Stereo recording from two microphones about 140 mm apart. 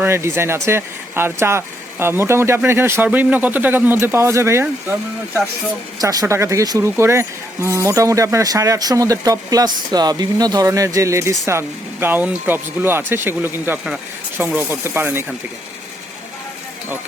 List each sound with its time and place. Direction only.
0.0 s speech: 20° right (ahead or behind)